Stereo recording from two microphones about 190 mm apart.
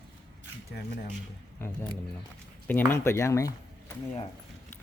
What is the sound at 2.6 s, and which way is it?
Speech, 10° left (ahead or behind).